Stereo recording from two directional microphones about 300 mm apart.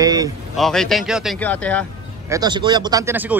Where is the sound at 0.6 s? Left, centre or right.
Centre.